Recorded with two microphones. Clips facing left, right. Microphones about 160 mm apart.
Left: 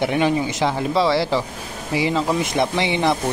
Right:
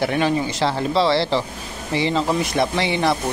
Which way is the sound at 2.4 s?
20° left (ahead or behind).